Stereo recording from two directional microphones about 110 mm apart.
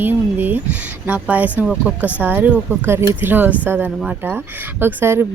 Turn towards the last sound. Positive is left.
turn(degrees=-20)  # may be behind; listen again after turning